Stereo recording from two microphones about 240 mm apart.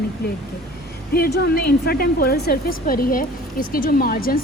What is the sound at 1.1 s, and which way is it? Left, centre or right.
A woman's voice, left.